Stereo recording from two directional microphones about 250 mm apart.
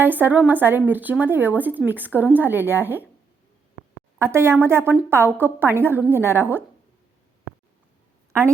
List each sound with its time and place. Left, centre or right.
0.0 s speech: centre
4.2 s speech: centre